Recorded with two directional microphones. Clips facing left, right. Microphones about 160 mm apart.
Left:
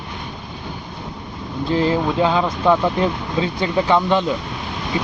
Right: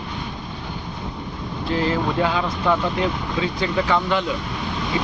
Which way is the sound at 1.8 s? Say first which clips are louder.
Left 3 dB; 25° left (ahead or behind).